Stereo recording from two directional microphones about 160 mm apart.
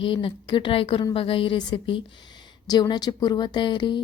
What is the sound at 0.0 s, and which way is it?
A woman's voice, 35° left (ahead or behind).